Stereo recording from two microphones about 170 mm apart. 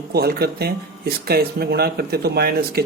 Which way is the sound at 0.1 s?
65° right (ahead or behind).